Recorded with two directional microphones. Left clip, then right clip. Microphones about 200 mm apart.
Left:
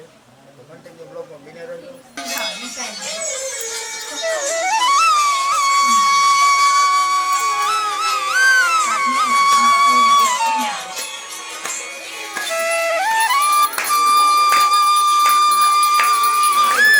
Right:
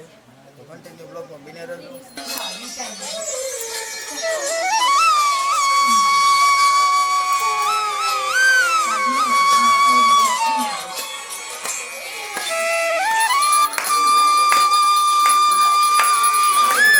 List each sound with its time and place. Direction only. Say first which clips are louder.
4.2 s music: left 1 dB; centre (ahead or behind)
12.5 s music: left 1 dB; centre (ahead or behind)